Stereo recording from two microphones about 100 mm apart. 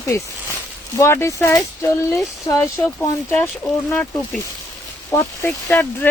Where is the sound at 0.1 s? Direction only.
30° left (ahead or behind).